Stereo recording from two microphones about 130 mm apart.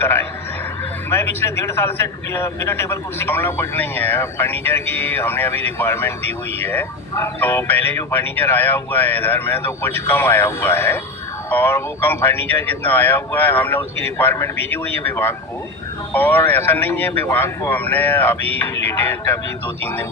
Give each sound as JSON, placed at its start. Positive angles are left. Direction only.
{"t": 0.0, "sound": "a man's voice", "side_deg": 15}